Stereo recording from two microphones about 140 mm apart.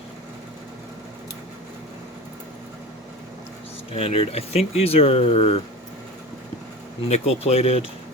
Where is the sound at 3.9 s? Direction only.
45° left (ahead or behind).